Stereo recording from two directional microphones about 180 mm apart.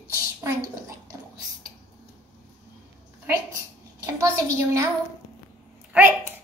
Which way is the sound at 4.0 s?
15° right (ahead or behind).